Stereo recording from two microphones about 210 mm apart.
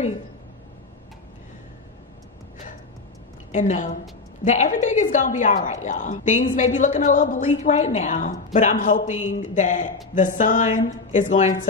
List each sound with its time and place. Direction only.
3.5 s a woman's voice: 35° left (ahead or behind)